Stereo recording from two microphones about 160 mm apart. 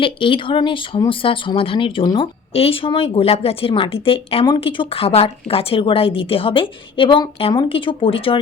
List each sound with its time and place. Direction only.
0.0 s speech: 35° left (ahead or behind)